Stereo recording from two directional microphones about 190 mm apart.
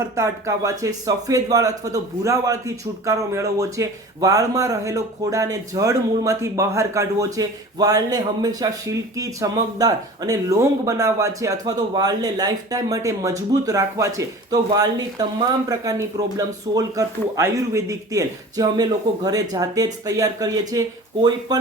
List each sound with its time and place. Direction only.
0.2 s speech: 15° right (ahead or behind)